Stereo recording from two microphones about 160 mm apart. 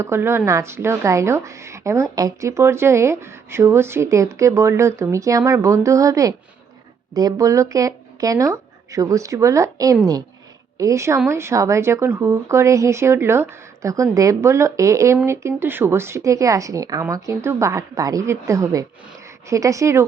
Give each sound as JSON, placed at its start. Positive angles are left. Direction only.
{"t": 0.0, "sound": "a woman's voice", "side_deg": -15}